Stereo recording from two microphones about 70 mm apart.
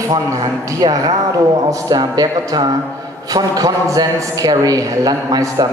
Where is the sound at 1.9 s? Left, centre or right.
Right.